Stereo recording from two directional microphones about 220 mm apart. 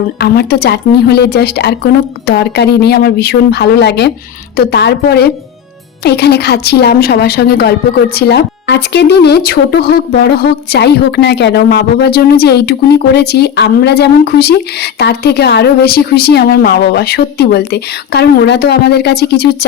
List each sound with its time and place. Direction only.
0.2 s speech: 45° left (ahead or behind)